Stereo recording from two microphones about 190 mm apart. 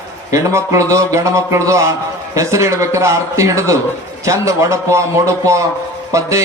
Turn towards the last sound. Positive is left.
turn(degrees=-15)  # may be behind; listen again after turning